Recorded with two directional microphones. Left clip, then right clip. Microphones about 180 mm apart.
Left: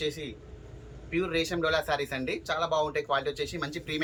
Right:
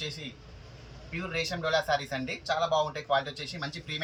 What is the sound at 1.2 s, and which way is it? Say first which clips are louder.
Speech: left 4 dB; 20° left (ahead or behind).